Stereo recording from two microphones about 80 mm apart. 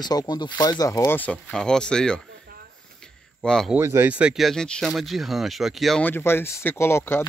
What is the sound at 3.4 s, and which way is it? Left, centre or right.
Speech, centre.